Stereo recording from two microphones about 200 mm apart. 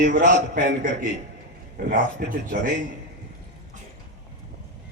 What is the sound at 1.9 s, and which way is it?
Speech, 45° right (ahead or behind).